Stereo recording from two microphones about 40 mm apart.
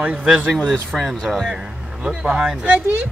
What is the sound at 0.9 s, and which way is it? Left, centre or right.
Speech, centre.